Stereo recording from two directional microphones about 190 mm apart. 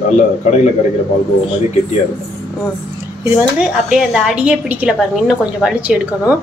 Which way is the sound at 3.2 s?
5° right (ahead or behind).